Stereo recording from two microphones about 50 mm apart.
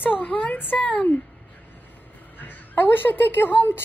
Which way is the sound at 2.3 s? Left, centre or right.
Left.